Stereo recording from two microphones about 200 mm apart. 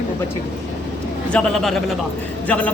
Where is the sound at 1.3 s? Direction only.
Centre (ahead or behind).